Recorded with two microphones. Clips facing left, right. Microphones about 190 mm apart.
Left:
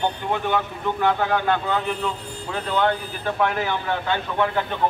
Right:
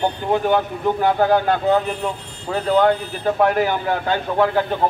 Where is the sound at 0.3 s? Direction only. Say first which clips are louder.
Right 6 dB; 40° right (ahead or behind).